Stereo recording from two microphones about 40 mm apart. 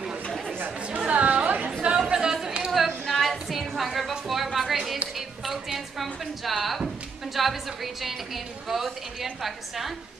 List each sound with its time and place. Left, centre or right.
0.8 s chatter: right
1.8 s chatter: right
3.1 s a sound: centre
7.3 s a woman's voice: centre